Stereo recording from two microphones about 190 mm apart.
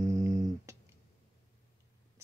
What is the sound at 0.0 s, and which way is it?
Humming, 15° right (ahead or behind).